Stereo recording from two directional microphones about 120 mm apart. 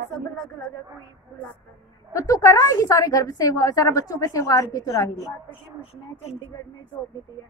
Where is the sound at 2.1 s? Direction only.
30° left (ahead or behind).